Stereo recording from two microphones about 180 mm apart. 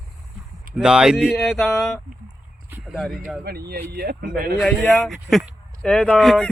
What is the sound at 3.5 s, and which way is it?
Speech, 60° right (ahead or behind).